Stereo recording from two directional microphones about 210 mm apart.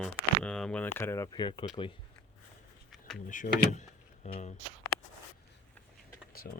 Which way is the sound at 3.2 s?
40° left (ahead or behind).